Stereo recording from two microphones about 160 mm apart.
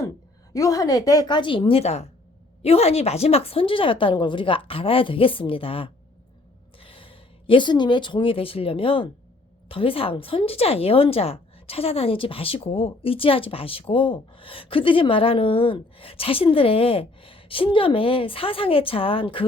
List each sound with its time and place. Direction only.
0.5 s a woman's voice: 20° left (ahead or behind)